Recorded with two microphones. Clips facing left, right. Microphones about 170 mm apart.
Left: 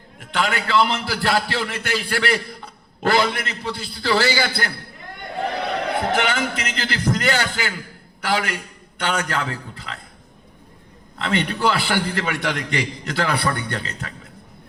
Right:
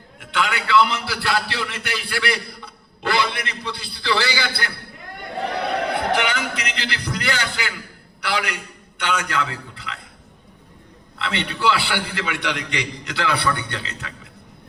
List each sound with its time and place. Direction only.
0.2 s a man's voice: 45° left (ahead or behind)
6.1 s a man's voice: 45° left (ahead or behind)
11.2 s a man's voice: 45° left (ahead or behind)